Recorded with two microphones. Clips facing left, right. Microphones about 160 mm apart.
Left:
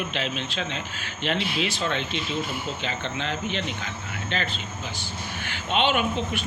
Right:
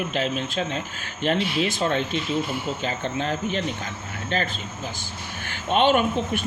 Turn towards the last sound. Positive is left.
turn(degrees=-50)  # may be behind; listen again after turning